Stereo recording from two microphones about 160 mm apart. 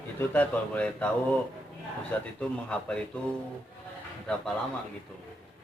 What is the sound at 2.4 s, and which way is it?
Speech, 5° left (ahead or behind).